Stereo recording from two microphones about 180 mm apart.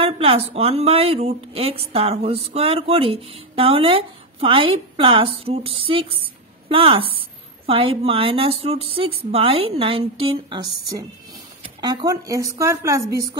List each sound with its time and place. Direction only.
0.0 s a woman's voice: 30° right (ahead or behind)